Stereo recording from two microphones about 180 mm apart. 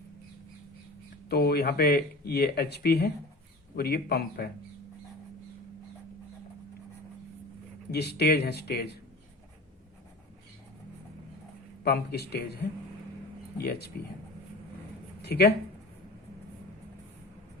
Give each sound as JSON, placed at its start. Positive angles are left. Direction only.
{"t": 1.3, "sound": "speech", "side_deg": 60}
{"t": 7.9, "sound": "speech", "side_deg": 65}
{"t": 11.8, "sound": "speech", "side_deg": 65}
{"t": 13.6, "sound": "speech", "side_deg": 65}
{"t": 15.2, "sound": "speech", "side_deg": 65}